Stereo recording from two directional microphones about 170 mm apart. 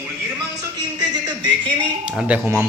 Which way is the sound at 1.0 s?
25° right (ahead or behind).